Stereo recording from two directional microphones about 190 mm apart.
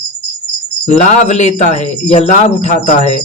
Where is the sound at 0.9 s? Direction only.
35° left (ahead or behind).